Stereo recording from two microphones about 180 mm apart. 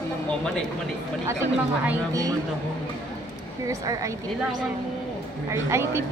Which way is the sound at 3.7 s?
15° right (ahead or behind).